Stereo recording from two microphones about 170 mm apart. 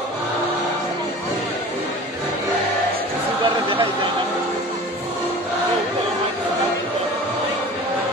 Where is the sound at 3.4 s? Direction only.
30° right (ahead or behind).